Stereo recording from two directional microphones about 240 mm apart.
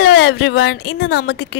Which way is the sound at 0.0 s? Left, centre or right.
Left.